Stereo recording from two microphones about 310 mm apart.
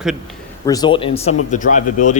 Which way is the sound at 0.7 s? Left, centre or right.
Centre.